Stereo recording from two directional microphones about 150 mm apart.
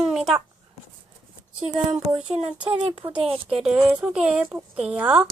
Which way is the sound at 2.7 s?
40° right (ahead or behind).